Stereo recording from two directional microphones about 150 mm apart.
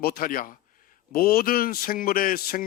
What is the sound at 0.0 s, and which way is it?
Speech, 80° left.